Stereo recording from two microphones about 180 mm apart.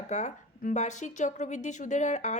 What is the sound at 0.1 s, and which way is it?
A woman's voice, 40° left (ahead or behind).